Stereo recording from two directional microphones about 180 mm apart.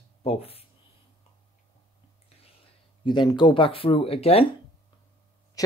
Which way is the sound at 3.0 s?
25° left (ahead or behind).